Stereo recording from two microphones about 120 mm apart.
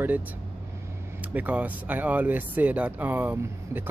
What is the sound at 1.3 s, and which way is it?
Speech, 15° right (ahead or behind).